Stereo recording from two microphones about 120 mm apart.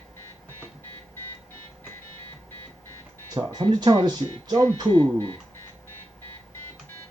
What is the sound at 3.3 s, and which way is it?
Speech, 35° right (ahead or behind).